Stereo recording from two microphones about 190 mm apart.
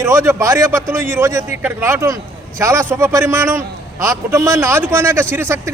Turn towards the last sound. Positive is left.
turn(degrees=-15)  # may be behind; listen again after turning